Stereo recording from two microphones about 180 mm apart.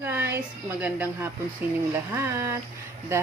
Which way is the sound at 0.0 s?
10° right (ahead or behind).